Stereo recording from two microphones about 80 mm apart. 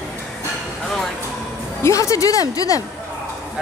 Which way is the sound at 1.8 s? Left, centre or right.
Left.